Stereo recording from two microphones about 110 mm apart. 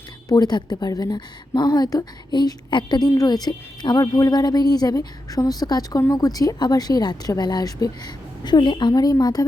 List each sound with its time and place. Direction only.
0.3 s a woman's voice: 40° left (ahead or behind)